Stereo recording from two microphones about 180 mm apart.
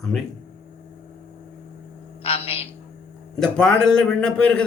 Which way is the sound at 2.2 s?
30° left (ahead or behind).